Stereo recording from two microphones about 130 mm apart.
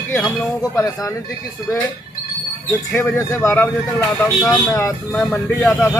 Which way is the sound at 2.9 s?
15° left (ahead or behind).